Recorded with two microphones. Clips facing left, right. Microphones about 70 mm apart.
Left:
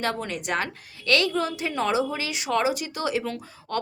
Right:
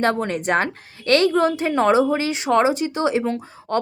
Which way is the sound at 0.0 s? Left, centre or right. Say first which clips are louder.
Right 8 dB; right.